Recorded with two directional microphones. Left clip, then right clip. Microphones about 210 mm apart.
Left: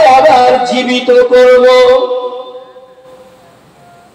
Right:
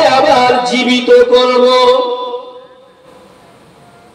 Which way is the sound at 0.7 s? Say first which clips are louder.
Even; 55° right (ahead or behind).